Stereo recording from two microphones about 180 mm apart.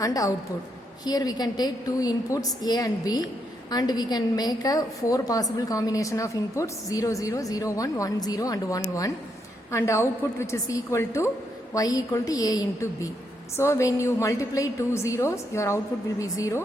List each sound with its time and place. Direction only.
0.0 s a woman's voice: 20° left (ahead or behind)